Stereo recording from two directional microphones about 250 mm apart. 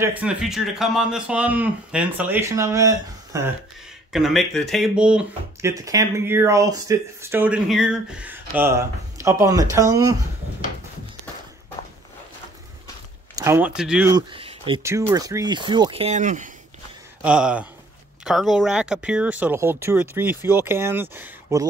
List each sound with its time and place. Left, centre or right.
0.0 s speech: centre
4.1 s speech: centre
13.4 s speech: centre
14.1 s speech: right
17.2 s speech: centre